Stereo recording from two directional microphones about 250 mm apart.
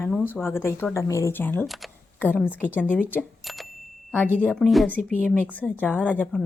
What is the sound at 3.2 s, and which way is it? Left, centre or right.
Cash register, centre.